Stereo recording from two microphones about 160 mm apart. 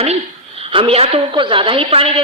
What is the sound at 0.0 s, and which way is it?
A woman's voice, 35° right (ahead or behind).